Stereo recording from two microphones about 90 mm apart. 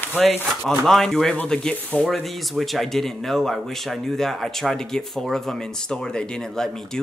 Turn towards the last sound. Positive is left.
turn(degrees=5)  # may be behind; listen again after turning